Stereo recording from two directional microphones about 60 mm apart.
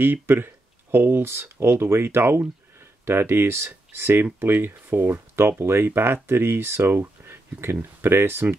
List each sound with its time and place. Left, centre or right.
0.0 s speech: right